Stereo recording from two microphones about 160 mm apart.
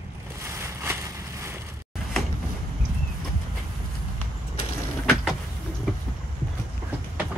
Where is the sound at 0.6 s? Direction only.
15° right (ahead or behind).